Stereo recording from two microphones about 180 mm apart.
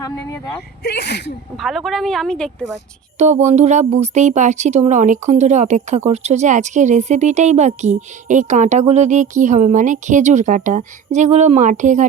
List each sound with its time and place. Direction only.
0.0 s speech: 20° left (ahead or behind)
0.9 s speech: 70° left (ahead or behind)
1.6 s a woman's voice: centre (ahead or behind)
3.2 s speech: 40° right (ahead or behind)